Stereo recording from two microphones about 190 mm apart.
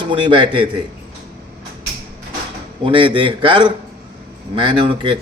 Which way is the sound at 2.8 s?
25° right (ahead or behind).